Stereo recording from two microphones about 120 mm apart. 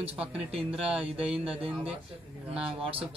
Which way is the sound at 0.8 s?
50° right (ahead or behind).